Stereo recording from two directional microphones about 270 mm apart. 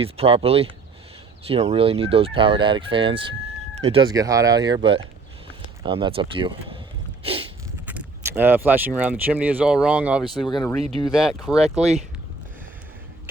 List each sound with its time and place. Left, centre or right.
0.0 s fowl: right
3.8 s speech: right
5.8 s fowl: centre
7.9 s speech: centre
10.5 s speech: centre
11.1 s speech: centre